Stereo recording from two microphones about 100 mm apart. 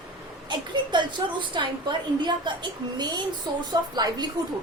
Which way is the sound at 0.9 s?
55° right (ahead or behind).